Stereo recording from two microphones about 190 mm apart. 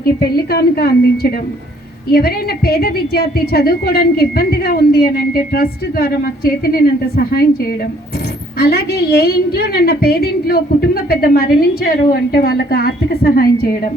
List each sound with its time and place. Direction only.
0.0 s a woman's voice: 55° left (ahead or behind)
8.5 s a woman's voice: 55° left (ahead or behind)